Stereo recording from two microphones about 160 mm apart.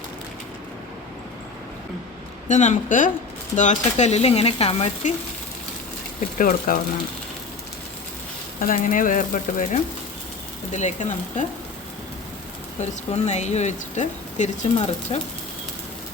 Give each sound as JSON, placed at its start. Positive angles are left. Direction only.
{"t": 2.5, "sound": "speech", "side_deg": 50}
{"t": 6.4, "sound": "speech", "side_deg": 60}
{"t": 8.6, "sound": "speech", "side_deg": 55}
{"t": 12.8, "sound": "speech", "side_deg": 45}